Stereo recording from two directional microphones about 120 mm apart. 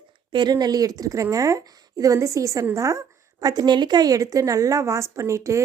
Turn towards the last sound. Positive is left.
turn(degrees=-25)  # may be behind; listen again after turning